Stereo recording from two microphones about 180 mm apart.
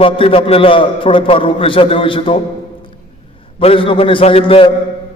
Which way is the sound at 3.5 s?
30° left (ahead or behind).